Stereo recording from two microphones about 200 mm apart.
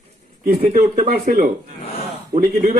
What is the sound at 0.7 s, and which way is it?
A man's voice, 40° right (ahead or behind).